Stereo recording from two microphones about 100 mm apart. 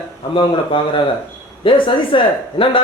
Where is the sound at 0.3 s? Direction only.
60° left (ahead or behind).